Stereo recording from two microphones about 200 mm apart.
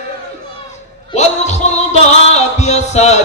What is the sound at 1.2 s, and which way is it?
Music, 35° left (ahead or behind).